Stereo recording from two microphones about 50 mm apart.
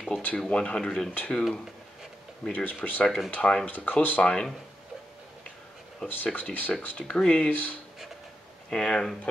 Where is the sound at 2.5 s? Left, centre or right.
Left.